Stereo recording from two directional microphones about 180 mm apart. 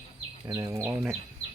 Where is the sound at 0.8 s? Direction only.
5° right (ahead or behind).